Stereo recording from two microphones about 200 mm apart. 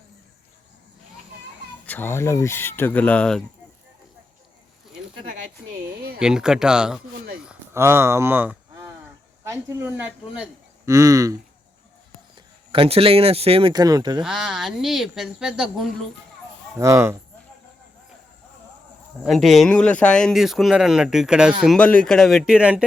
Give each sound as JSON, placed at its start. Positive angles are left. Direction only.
{"t": 1.9, "sound": "speech", "side_deg": 10}
{"t": 6.1, "sound": "speech", "side_deg": -5}
{"t": 7.3, "sound": "a sound", "side_deg": -10}
{"t": 9.4, "sound": "speech", "side_deg": -15}
{"t": 12.7, "sound": "speech", "side_deg": -30}
{"t": 14.2, "sound": "speech", "side_deg": -5}
{"t": 16.7, "sound": "speech", "side_deg": -15}
{"t": 19.2, "sound": "speech", "side_deg": 0}